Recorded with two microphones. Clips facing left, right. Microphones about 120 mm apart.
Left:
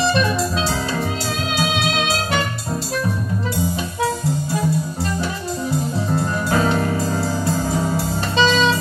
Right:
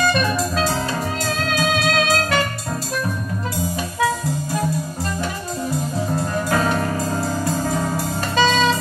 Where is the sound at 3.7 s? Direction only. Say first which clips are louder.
Right 1 dB; 25° left (ahead or behind).